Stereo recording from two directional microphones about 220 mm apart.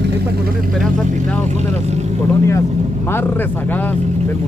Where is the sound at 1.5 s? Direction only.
30° right (ahead or behind).